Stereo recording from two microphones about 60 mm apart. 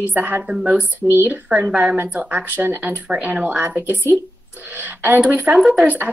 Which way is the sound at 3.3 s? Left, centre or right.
Right.